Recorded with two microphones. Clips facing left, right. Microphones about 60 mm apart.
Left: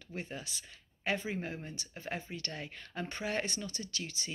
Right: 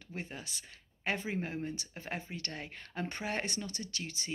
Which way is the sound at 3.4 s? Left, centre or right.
Right.